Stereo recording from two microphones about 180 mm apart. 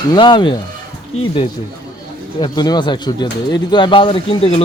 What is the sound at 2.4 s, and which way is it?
Speech, 20° left (ahead or behind).